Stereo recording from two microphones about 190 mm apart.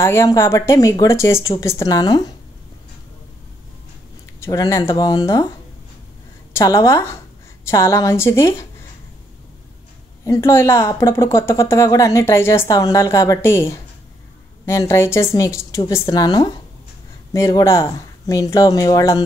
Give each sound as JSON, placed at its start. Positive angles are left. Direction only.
{"t": 0.0, "sound": "a woman's voice", "side_deg": 15}
{"t": 4.4, "sound": "speech", "side_deg": 15}
{"t": 6.5, "sound": "speech", "side_deg": 15}
{"t": 10.2, "sound": "a woman's voice", "side_deg": 15}